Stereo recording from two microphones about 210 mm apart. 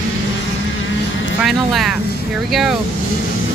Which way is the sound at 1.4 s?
Centre (ahead or behind).